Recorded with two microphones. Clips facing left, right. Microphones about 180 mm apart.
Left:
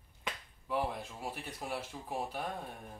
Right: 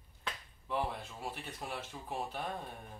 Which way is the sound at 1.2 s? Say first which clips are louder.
Even; 10° left (ahead or behind).